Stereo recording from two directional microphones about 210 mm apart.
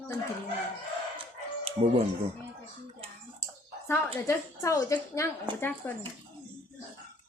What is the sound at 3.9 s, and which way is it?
A woman's voice, 15° left (ahead or behind).